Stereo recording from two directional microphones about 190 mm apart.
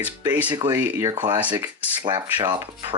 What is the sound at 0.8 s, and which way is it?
Speech, 10° right (ahead or behind).